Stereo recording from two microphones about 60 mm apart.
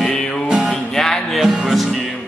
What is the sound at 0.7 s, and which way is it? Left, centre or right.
Music, centre.